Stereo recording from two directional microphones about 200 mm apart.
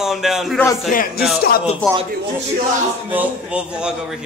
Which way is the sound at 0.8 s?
45° left (ahead or behind).